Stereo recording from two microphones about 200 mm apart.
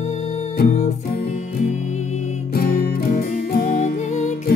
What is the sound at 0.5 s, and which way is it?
Music, 40° left (ahead or behind).